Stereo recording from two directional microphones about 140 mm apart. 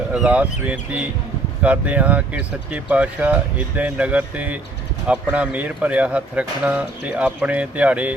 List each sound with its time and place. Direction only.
0.1 s speech: 10° right (ahead or behind)